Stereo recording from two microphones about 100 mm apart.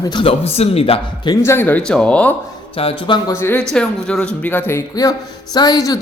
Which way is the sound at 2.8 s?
70° left (ahead or behind).